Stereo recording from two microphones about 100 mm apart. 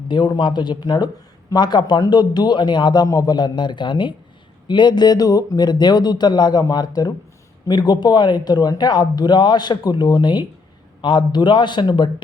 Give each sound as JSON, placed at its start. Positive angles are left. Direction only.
{"t": 0.1, "sound": "speech", "side_deg": 50}